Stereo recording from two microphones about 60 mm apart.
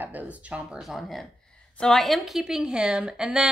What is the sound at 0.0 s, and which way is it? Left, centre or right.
Speech, right.